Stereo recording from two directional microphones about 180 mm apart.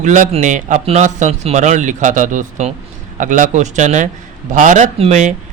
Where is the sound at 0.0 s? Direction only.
40° right (ahead or behind).